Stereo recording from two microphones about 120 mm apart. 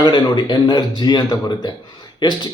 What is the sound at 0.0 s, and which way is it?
Speech, 40° left (ahead or behind).